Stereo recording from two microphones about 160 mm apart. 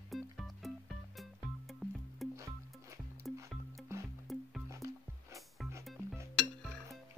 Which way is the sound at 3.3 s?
Centre (ahead or behind).